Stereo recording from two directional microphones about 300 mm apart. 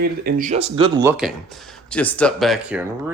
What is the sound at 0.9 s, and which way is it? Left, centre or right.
Speech, centre.